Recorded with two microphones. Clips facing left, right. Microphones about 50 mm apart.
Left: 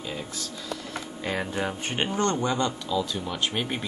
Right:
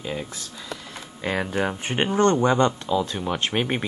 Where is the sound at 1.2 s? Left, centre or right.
Centre.